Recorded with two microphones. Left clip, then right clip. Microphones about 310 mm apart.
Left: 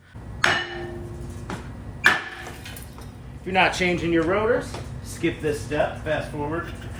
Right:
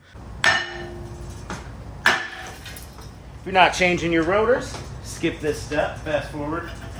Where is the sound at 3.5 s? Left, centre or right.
Centre.